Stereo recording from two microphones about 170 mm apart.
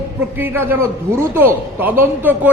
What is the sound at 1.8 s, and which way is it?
Speech, 10° right (ahead or behind).